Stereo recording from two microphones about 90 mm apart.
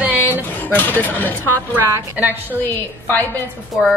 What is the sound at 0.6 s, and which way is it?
Speech, 20° left (ahead or behind).